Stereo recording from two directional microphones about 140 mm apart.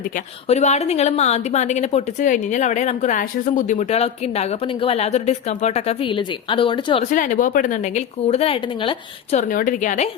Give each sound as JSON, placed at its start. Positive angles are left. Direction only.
{"t": 0.4, "sound": "speech", "side_deg": 50}
{"t": 2.2, "sound": "speech", "side_deg": 65}
{"t": 3.8, "sound": "speech", "side_deg": 50}
{"t": 7.0, "sound": "speech", "side_deg": 60}
{"t": 9.3, "sound": "speech", "side_deg": 70}